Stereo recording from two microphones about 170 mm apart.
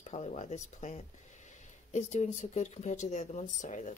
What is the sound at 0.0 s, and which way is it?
Speech, 40° left (ahead or behind).